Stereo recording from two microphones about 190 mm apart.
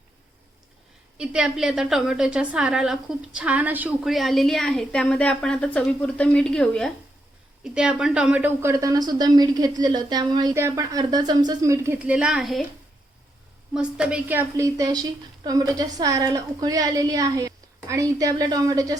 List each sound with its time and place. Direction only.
1.2 s a woman's voice: 5° right (ahead or behind)
13.7 s a woman's voice: 5° right (ahead or behind)